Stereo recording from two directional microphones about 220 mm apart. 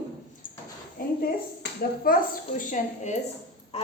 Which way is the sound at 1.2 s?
45° left (ahead or behind).